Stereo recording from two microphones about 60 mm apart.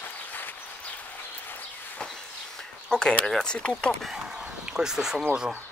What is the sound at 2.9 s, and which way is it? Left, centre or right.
Speech, centre.